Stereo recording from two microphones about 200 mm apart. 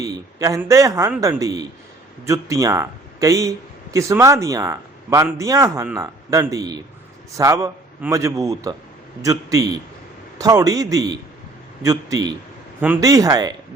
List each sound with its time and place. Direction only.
0.0 s speech: 15° right (ahead or behind)